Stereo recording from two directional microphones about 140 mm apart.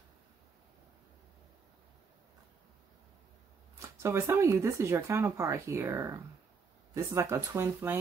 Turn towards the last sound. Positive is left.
turn(degrees=-20)  # may be behind; listen again after turning